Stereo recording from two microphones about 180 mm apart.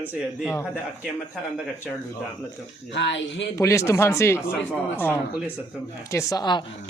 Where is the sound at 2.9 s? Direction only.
90° left.